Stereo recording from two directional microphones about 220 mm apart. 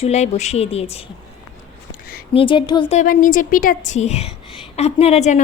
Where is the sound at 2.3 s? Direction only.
25° left (ahead or behind).